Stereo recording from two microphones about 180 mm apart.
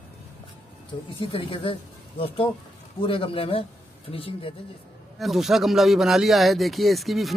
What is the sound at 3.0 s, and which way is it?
Speech, 30° left (ahead or behind).